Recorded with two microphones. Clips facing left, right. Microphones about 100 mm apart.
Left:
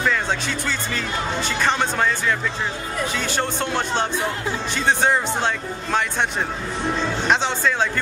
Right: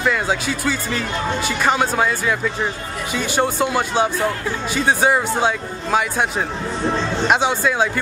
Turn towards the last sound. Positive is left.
turn(degrees=-10)  # may be behind; listen again after turning